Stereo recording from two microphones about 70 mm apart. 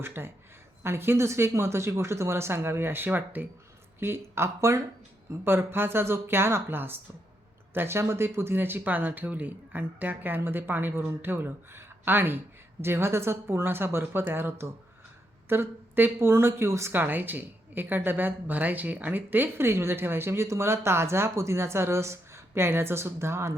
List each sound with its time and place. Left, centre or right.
0.0 s speech: right